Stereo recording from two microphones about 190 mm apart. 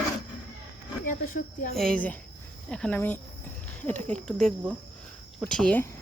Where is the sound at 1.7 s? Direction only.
5° left (ahead or behind).